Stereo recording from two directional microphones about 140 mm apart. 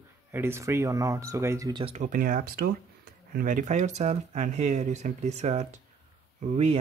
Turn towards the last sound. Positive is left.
turn(degrees=-50)  # may be behind; listen again after turning